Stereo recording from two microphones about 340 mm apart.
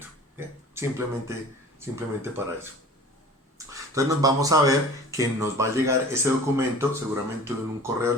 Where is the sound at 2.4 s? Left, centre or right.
Centre.